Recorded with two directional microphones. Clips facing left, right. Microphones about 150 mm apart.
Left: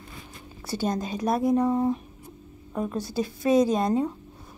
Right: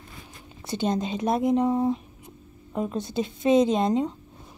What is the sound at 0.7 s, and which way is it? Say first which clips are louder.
A woman's voice: right 2 dB; 20° right (ahead or behind).